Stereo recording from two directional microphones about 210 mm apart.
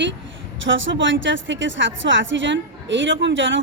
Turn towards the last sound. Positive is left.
turn(degrees=-65)  # may be behind; listen again after turning